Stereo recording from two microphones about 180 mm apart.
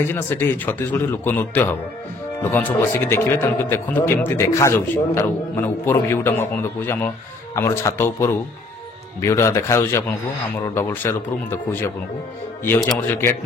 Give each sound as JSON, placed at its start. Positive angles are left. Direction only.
{"t": 0.1, "sound": "speech", "side_deg": 10}
{"t": 13.1, "sound": "speech", "side_deg": 10}